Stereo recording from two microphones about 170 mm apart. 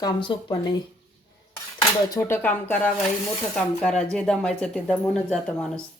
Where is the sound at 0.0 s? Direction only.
30° left (ahead or behind).